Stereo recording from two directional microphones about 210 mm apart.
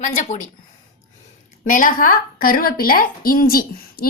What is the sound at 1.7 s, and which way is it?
A woman's voice, 40° left (ahead or behind).